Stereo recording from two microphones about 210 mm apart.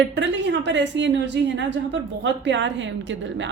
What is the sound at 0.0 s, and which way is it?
A woman's voice, 60° right (ahead or behind).